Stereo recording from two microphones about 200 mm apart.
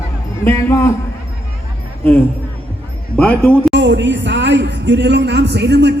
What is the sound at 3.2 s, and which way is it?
Speech, 5° left (ahead or behind).